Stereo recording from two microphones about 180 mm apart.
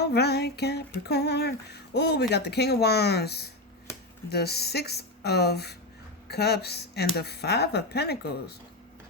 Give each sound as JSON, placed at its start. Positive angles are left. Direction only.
{"t": 0.0, "sound": "female singing", "side_deg": 65}